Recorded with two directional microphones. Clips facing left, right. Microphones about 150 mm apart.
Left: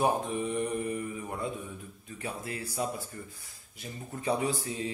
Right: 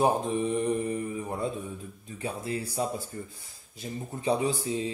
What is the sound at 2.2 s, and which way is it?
Speech, 25° right (ahead or behind).